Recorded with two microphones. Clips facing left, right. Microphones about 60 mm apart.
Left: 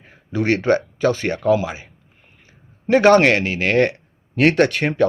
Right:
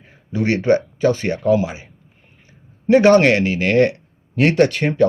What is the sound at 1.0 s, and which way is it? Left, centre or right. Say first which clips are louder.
Speech: even; left.